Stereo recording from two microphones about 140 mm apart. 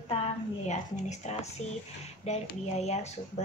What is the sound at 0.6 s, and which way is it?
Speech, 55° left (ahead or behind).